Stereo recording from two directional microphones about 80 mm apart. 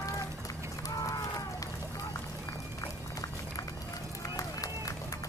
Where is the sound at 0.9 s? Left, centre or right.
Left.